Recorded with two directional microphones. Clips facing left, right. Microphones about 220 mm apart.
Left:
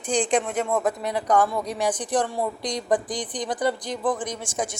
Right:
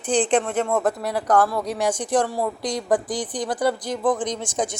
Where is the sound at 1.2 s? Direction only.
5° right (ahead or behind).